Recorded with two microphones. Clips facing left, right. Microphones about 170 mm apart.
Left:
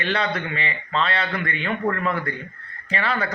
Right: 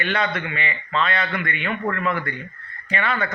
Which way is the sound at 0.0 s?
30° left (ahead or behind).